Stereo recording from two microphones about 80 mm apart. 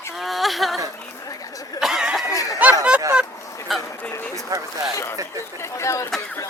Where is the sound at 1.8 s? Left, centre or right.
Centre.